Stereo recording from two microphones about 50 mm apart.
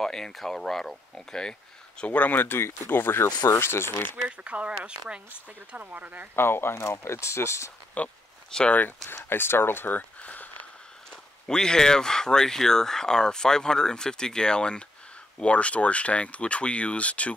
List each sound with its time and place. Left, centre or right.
0.0 s speech: centre
2.1 s speech: left
4.3 s speech: right
6.3 s speech: left
8.0 s speech: left
8.5 s speech: centre
9.1 s speech: left
11.1 s speech: centre